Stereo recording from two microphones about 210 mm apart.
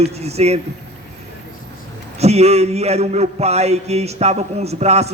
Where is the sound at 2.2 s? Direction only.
30° right (ahead or behind).